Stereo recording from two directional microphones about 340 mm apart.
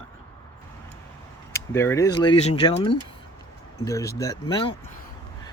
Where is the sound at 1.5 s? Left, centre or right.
Centre.